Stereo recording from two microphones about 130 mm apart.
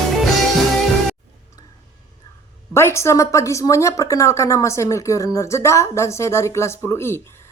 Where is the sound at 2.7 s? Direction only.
20° left (ahead or behind).